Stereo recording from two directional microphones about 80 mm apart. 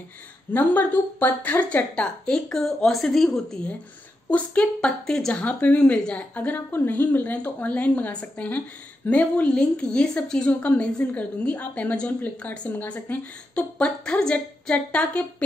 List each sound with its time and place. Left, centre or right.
0.5 s a woman's voice: left